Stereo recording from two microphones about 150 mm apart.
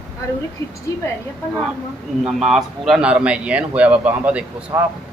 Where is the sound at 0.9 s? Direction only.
20° left (ahead or behind).